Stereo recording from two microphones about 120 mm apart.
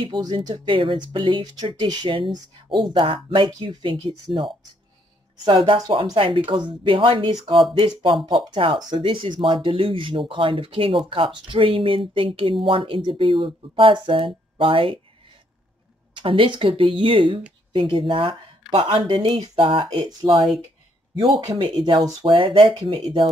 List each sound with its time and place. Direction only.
0.0 s speech: 40° right (ahead or behind)
0.7 s speech: 45° right (ahead or behind)
16.2 s speech: 45° right (ahead or behind)